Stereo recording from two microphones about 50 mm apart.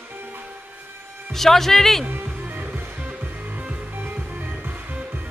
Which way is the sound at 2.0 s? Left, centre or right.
Right.